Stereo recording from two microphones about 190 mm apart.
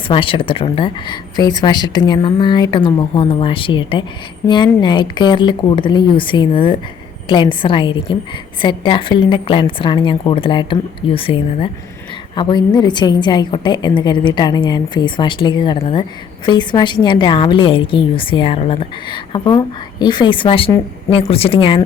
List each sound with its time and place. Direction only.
0.1 s a woman's voice: 30° left (ahead or behind)